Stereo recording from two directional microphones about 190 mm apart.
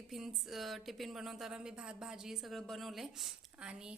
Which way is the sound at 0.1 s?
Centre (ahead or behind).